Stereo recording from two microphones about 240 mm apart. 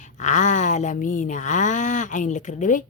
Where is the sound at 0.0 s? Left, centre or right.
Left.